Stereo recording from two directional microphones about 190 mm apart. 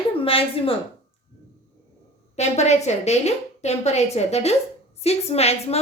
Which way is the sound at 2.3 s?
35° left (ahead or behind).